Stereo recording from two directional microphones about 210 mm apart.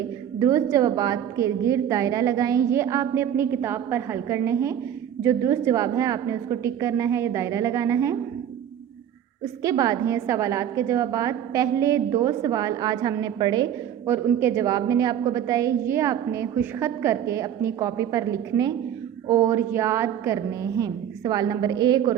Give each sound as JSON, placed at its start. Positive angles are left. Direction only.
{"t": 0.3, "sound": "a woman's voice", "side_deg": -15}
{"t": 9.4, "sound": "a woman's voice", "side_deg": -15}